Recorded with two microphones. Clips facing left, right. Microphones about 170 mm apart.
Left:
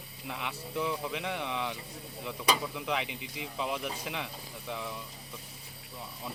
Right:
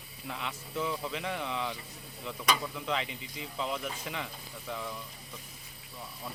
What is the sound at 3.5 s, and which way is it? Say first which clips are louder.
Speech: left 1 dB; 15° left (ahead or behind).